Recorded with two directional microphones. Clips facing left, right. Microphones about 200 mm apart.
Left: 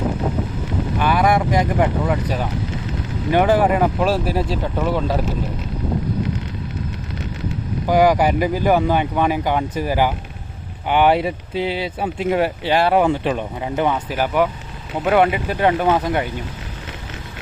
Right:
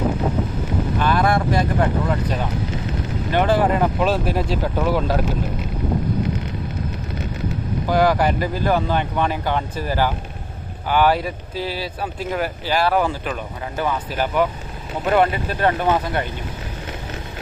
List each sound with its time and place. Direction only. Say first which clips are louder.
0.9 s speech: left 2 dB; 10° left (ahead or behind)
7.9 s speech: left 3 dB; 15° left (ahead or behind)